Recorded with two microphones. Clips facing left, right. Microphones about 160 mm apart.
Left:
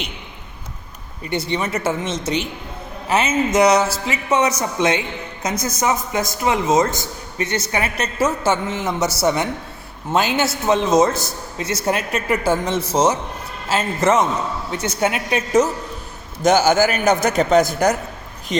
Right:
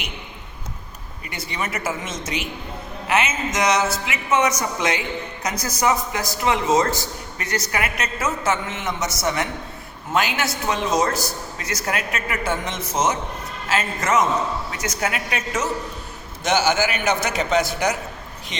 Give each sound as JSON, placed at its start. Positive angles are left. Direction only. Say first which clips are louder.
{"t": 1.3, "sound": "a man's voice", "louder": "left 7 dB", "side_deg": 30}
{"t": 16.4, "sound": "a man's voice", "louder": "left 5 dB", "side_deg": 45}